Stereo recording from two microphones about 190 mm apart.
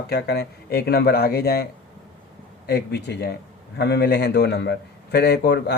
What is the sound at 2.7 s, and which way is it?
A man's voice, 60° left (ahead or behind).